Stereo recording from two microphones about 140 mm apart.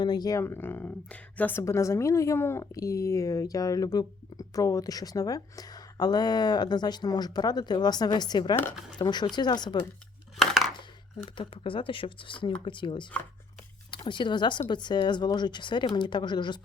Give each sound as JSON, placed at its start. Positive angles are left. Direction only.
{"t": 0.0, "sound": "speech", "side_deg": 30}
{"t": 10.3, "sound": "a sound", "side_deg": 0}
{"t": 11.3, "sound": "speech", "side_deg": 40}